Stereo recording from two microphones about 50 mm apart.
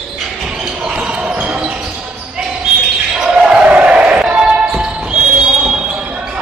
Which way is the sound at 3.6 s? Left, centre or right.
Right.